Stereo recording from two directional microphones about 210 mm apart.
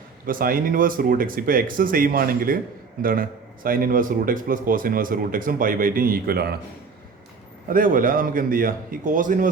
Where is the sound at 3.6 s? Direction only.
45° right (ahead or behind).